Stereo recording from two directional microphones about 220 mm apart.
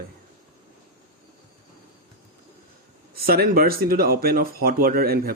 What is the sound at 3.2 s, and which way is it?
Speech, 45° right (ahead or behind).